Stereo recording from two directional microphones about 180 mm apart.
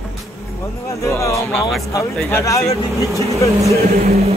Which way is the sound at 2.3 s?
15° left (ahead or behind).